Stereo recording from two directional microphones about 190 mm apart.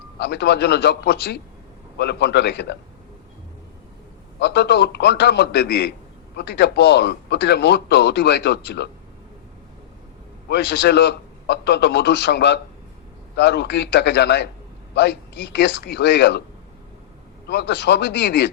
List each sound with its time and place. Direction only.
0.2 s speech: 65° left (ahead or behind)
4.4 s speech: 60° left (ahead or behind)
10.5 s speech: 65° left (ahead or behind)
17.5 s speech: 65° left (ahead or behind)